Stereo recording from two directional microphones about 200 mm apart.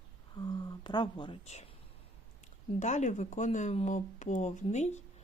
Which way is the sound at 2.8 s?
35° left (ahead or behind).